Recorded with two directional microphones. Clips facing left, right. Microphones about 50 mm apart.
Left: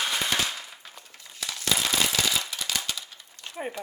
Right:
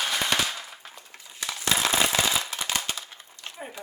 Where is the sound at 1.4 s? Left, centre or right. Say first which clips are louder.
Right 2 dB; right.